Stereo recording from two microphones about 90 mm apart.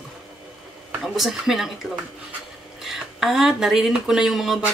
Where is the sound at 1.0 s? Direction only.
Centre (ahead or behind).